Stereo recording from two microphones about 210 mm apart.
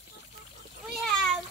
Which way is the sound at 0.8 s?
Centre (ahead or behind).